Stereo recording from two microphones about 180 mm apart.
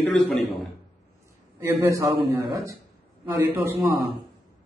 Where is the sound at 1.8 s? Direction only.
15° right (ahead or behind).